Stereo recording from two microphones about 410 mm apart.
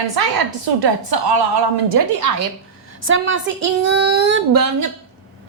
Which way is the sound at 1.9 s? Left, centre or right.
Right.